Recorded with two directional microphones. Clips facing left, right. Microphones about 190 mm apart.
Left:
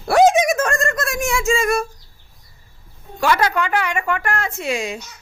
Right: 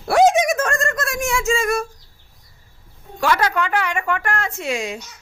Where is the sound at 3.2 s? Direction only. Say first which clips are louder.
Left 1 dB; 10° left (ahead or behind).